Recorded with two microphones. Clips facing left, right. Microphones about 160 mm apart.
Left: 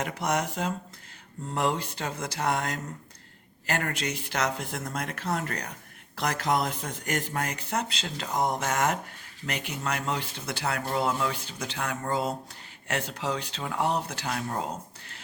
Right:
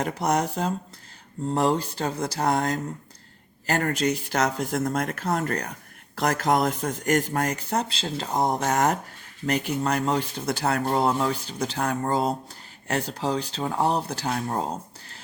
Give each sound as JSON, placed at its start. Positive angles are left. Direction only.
{"t": 0.0, "sound": "speech", "side_deg": -35}